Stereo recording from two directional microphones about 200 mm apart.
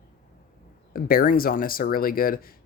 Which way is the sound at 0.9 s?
45° left (ahead or behind).